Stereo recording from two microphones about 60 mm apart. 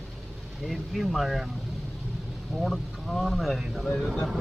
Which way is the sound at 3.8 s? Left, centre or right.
Centre.